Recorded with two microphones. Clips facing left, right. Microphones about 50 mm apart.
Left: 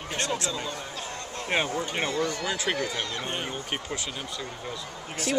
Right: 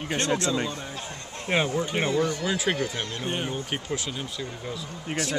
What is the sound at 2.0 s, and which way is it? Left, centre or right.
Speech, centre.